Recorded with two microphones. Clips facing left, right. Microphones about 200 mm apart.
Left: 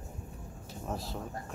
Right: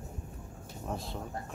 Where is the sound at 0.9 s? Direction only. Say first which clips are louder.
Even; centre (ahead or behind).